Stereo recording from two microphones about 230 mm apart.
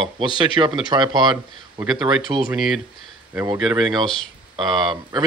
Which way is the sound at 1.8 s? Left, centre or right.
Centre.